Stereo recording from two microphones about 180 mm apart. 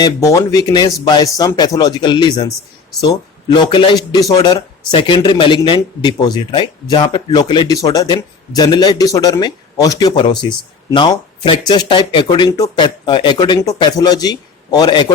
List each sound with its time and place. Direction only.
0.0 s speech: 15° left (ahead or behind)